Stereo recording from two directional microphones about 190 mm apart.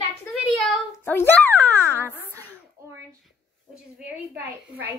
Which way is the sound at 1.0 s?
10° left (ahead or behind).